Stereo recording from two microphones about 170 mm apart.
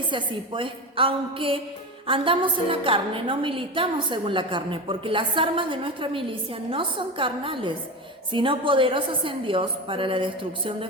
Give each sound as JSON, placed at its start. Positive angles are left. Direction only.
{"t": 0.0, "sound": "a woman's voice", "side_deg": -30}